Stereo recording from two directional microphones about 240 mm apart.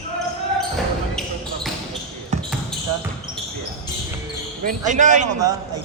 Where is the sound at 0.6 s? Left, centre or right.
Centre.